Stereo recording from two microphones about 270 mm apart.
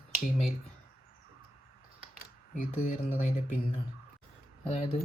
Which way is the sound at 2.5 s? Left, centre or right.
Left.